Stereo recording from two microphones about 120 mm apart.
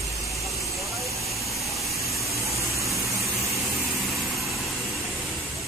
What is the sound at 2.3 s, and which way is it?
Vehicle, 25° right (ahead or behind).